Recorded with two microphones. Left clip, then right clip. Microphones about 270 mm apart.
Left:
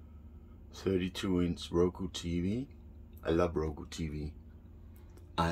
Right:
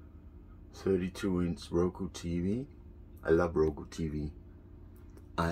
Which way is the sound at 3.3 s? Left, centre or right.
Centre.